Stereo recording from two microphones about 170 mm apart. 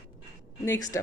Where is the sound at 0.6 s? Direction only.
20° left (ahead or behind).